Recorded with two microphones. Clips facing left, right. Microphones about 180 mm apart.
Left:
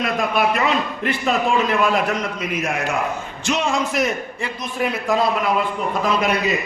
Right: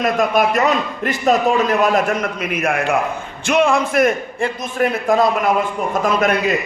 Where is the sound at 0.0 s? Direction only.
45° right (ahead or behind).